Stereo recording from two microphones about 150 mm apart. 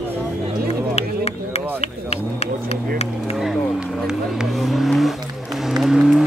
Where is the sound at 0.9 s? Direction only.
45° left (ahead or behind).